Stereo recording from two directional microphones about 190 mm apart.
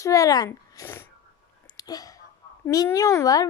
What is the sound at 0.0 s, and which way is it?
Speech, 15° left (ahead or behind).